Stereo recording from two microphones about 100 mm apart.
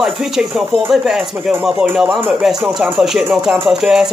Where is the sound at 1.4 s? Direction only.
20° right (ahead or behind).